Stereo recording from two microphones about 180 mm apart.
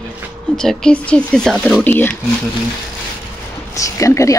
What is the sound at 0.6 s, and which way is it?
Speech, 5° left (ahead or behind).